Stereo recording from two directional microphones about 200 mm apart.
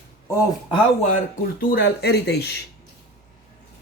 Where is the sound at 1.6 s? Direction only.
50° left (ahead or behind).